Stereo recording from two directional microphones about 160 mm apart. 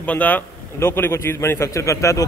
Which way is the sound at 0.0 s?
10° left (ahead or behind).